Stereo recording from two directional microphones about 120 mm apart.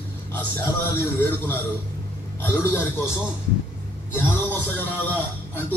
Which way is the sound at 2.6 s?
20° left (ahead or behind).